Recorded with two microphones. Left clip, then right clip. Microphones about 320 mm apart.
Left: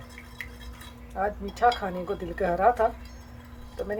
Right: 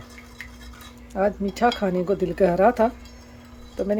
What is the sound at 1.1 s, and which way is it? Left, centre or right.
Speech, right.